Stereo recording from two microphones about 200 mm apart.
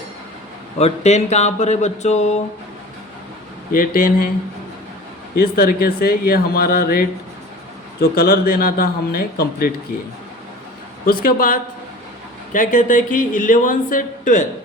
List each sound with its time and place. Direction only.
0.8 s speech: 35° left (ahead or behind)
3.7 s speech: 45° left (ahead or behind)
5.4 s speech: 50° left (ahead or behind)
11.0 s speech: 45° left (ahead or behind)